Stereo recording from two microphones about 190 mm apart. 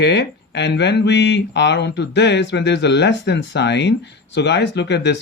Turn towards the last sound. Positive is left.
turn(degrees=65)  # may be behind; listen again after turning